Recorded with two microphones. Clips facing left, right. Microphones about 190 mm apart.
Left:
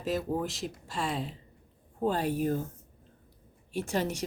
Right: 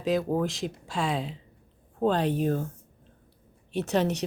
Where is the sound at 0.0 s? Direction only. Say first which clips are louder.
Right 5 dB; 5° left (ahead or behind).